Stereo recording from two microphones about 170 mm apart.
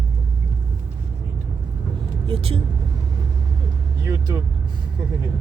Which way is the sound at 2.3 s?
35° right (ahead or behind).